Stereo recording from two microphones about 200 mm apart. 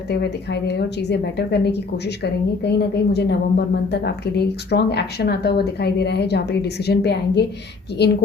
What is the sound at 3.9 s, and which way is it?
Speech, 55° left (ahead or behind).